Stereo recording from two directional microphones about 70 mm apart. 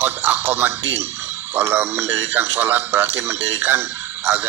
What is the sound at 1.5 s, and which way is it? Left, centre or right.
Speech, right.